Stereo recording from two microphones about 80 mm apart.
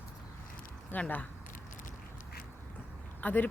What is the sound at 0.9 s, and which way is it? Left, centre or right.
Speech, centre.